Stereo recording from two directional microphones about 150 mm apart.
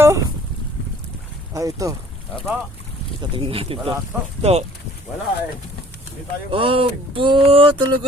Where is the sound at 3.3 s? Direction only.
40° right (ahead or behind).